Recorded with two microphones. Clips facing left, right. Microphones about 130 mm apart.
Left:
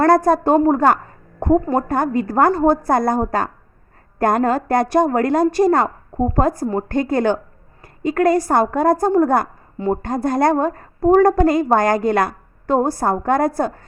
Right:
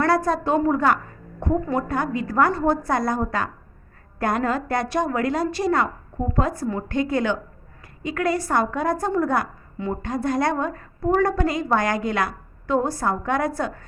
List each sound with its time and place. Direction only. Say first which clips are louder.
0.3 s a woman's voice: left 6 dB; 45° left (ahead or behind)